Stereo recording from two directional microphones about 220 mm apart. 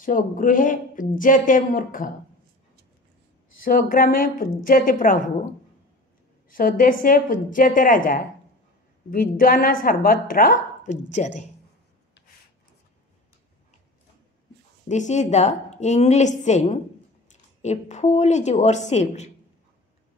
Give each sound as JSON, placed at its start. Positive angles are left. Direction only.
{"t": 0.0, "sound": "a woman's voice", "side_deg": 40}
{"t": 3.6, "sound": "a woman's voice", "side_deg": 40}
{"t": 6.5, "sound": "a woman's voice", "side_deg": 40}
{"t": 14.9, "sound": "a woman's voice", "side_deg": 30}